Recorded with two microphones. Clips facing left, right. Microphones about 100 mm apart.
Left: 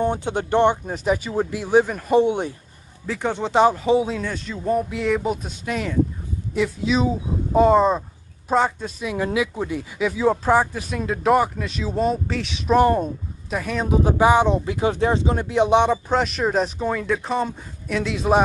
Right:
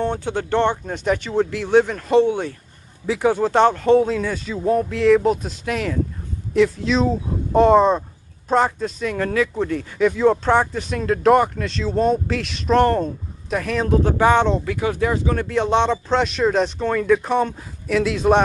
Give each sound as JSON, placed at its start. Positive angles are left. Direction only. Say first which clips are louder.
{"t": 0.0, "sound": "speech", "louder": "even", "side_deg": 15}
{"t": 3.1, "sound": "speech", "louder": "right 6 dB", "side_deg": -5}
{"t": 14.6, "sound": "speech", "louder": "even", "side_deg": 25}